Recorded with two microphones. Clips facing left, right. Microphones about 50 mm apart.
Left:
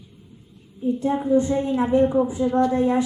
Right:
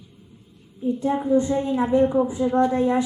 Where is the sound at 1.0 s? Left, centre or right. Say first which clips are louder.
Even; right.